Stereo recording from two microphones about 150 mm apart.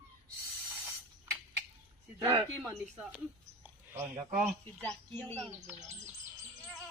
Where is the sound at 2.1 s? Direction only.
20° right (ahead or behind).